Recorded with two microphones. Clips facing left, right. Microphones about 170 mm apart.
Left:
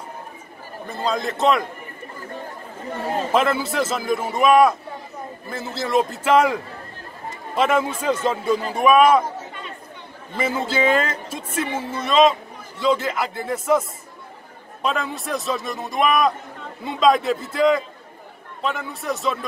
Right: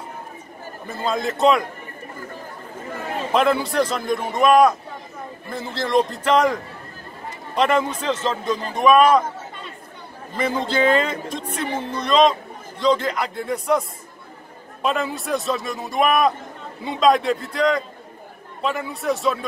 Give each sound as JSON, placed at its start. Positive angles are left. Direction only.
{"t": 0.8, "sound": "speech", "side_deg": 0}
{"t": 3.0, "sound": "speech", "side_deg": 30}
{"t": 3.3, "sound": "a man's voice", "side_deg": 0}
{"t": 10.3, "sound": "speech", "side_deg": 5}